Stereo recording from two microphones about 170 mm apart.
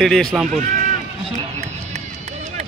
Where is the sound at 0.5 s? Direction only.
50° right (ahead or behind).